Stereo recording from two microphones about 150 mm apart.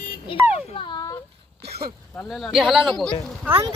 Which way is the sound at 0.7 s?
25° left (ahead or behind).